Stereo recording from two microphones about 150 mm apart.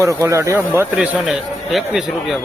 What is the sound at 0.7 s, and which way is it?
A man's voice, 5° right (ahead or behind).